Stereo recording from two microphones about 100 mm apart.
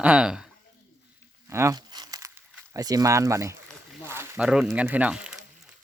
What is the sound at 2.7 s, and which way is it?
Speech, 40° right (ahead or behind).